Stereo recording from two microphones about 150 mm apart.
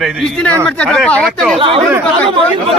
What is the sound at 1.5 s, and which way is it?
Speech, 35° right (ahead or behind).